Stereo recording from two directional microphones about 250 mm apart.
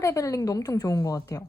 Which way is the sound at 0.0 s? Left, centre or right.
Centre.